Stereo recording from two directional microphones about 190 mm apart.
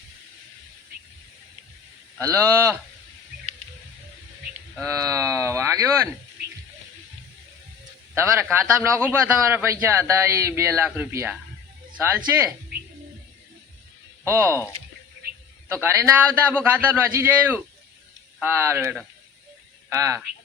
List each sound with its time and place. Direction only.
2.3 s a man's voice: 15° right (ahead or behind)
4.9 s a sound: 15° right (ahead or behind)
8.1 s a man's voice: 10° right (ahead or behind)
14.3 s a man's voice: 15° right (ahead or behind)
15.7 s a man's voice: 15° right (ahead or behind)